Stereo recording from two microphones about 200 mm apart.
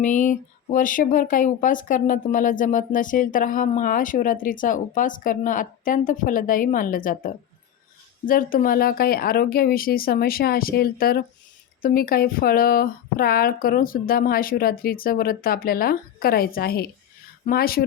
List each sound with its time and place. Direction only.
0.0 s speech: 40° left (ahead or behind)
8.3 s speech: 45° left (ahead or behind)